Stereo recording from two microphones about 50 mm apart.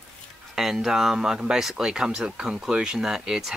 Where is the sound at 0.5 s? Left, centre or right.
Centre.